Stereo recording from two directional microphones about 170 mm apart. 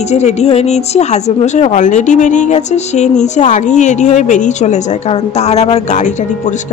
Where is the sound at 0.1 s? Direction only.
40° left (ahead or behind).